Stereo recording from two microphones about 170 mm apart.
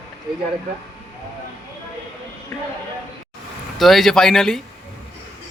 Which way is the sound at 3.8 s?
Centre (ahead or behind).